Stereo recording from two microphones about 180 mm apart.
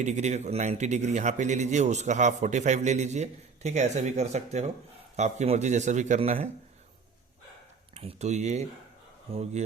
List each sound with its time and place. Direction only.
0.0 s a man's voice: 40° right (ahead or behind)
7.9 s a man's voice: 40° right (ahead or behind)